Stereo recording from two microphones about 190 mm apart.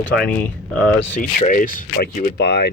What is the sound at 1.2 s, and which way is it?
Speech, 45° left (ahead or behind).